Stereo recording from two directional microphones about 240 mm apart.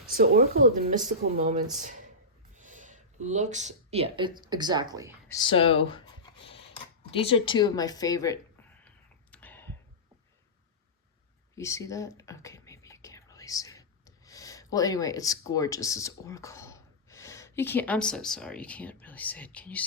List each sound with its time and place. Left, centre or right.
0.1 s speech: right; by 5.1 s centre
5.3 s speech: centre
9.3 s clicking: centre
11.5 s speech: centre